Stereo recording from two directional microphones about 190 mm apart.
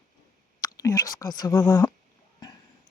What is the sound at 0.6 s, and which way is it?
Speech, 20° left (ahead or behind).